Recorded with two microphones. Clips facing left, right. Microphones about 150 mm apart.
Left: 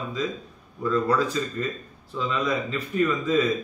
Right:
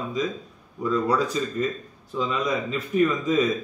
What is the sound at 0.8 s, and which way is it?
Speech, 15° right (ahead or behind).